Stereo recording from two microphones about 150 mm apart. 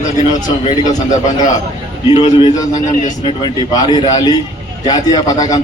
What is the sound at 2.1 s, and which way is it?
A man's voice, 30° left (ahead or behind).